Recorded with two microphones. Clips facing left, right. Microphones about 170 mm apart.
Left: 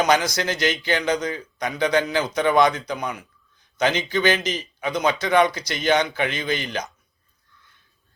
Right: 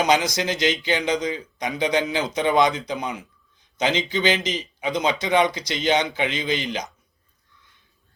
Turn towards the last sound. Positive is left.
turn(degrees=-20)  # may be behind; listen again after turning